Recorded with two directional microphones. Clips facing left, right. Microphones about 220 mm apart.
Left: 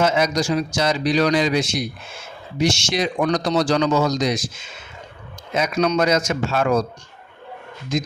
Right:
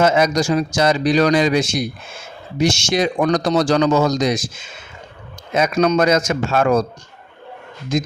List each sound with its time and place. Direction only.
0.0 s a man's voice: 50° right (ahead or behind)
5.5 s a man's voice: 50° right (ahead or behind)
7.9 s a man's voice: 45° right (ahead or behind)